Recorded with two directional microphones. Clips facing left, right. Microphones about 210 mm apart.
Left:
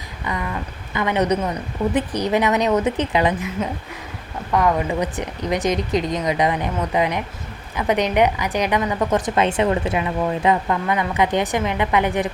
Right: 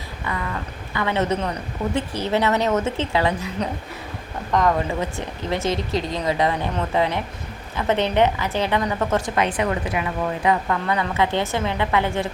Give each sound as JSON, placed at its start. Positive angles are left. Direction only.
{"t": 0.9, "sound": "a woman's voice", "side_deg": 15}
{"t": 3.6, "sound": "a woman's voice", "side_deg": 5}